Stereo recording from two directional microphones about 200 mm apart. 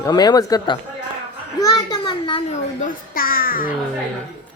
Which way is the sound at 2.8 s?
45° left (ahead or behind).